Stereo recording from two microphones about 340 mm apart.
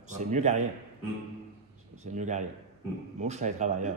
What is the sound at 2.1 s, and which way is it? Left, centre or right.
Speech, right.